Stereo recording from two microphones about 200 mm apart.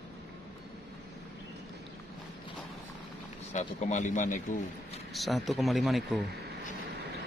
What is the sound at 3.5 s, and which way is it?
A man's voice, 35° left (ahead or behind).